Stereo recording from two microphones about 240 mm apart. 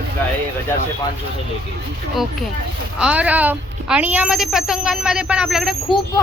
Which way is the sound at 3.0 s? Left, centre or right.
Centre.